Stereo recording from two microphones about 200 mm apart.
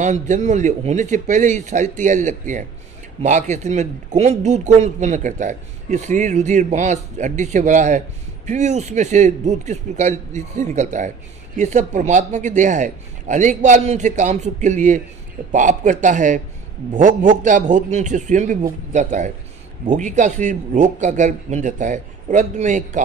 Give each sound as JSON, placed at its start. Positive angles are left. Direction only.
{"t": 0.0, "sound": "speech", "side_deg": -35}